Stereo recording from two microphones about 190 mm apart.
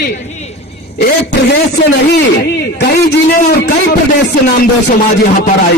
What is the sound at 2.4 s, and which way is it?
A man's voice, 55° left (ahead or behind).